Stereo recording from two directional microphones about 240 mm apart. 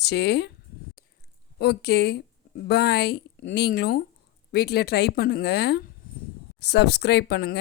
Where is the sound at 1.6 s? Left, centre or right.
Left.